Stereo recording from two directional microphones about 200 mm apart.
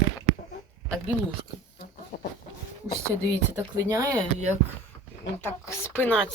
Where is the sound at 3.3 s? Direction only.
15° right (ahead or behind).